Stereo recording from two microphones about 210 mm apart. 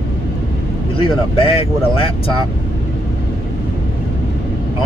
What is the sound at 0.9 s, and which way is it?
Speech, 25° left (ahead or behind).